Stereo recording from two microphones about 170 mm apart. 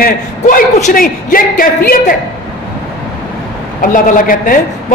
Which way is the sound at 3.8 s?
50° left (ahead or behind).